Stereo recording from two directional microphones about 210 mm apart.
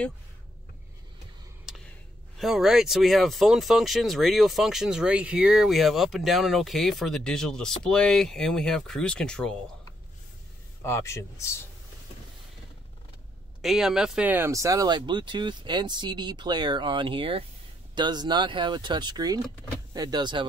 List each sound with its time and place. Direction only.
1.7 s a sound: centre (ahead or behind)
2.3 s speech: centre (ahead or behind)
10.8 s a man's voice: 15° left (ahead or behind)
13.6 s speech: centre (ahead or behind); by 20.4 s 20° right (ahead or behind)